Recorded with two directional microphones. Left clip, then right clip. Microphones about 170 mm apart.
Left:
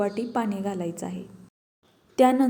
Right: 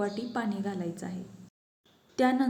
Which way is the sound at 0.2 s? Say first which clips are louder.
Left 6 dB; 10° left (ahead or behind).